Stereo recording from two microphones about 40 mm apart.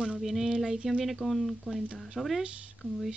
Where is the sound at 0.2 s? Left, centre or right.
Centre.